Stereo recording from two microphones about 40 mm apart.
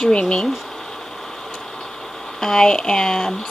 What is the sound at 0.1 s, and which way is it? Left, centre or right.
Speech, left.